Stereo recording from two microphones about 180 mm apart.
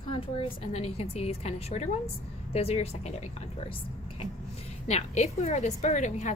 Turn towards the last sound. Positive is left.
turn(degrees=40)  # may be behind; listen again after turning